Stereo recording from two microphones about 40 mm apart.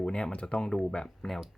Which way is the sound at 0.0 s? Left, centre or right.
Left.